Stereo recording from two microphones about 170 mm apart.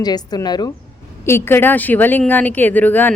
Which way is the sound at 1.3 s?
15° left (ahead or behind).